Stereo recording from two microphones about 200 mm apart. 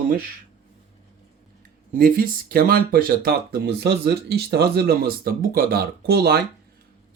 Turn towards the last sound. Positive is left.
turn(degrees=-55)  # may be behind; listen again after turning